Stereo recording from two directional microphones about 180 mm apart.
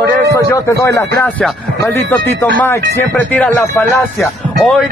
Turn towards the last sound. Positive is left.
turn(degrees=5)  # may be behind; listen again after turning